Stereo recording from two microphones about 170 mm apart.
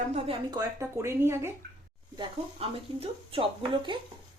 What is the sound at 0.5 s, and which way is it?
Speech, 15° right (ahead or behind).